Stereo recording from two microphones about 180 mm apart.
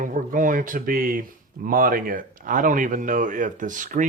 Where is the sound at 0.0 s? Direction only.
45° right (ahead or behind).